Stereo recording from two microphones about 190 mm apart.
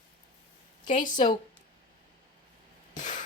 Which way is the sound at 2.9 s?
40° left (ahead or behind).